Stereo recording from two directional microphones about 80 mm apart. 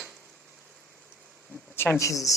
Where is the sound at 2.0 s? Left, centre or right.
Left.